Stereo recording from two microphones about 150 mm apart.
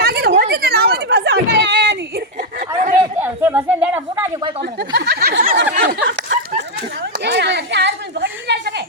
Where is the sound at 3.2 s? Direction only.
15° right (ahead or behind).